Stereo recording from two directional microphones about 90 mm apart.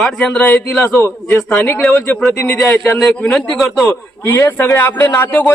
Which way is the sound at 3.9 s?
20° left (ahead or behind).